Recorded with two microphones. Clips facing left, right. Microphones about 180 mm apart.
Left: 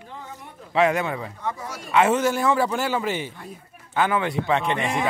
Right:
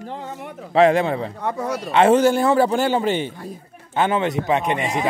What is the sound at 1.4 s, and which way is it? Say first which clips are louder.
Speech: right 7 dB; 65° right (ahead or behind).